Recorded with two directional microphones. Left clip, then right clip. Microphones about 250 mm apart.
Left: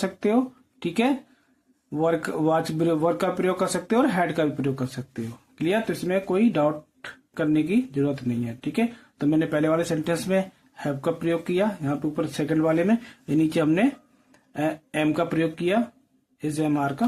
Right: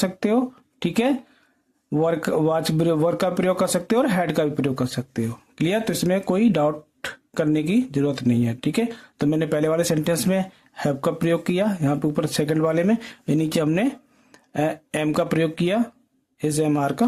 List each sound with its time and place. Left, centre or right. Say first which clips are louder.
0.0 s speech: right 2 dB; right